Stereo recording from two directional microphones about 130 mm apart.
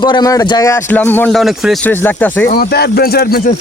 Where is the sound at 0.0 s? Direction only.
35° left (ahead or behind).